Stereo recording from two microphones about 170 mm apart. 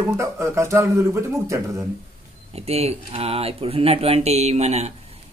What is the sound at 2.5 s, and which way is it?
Speech, 35° right (ahead or behind).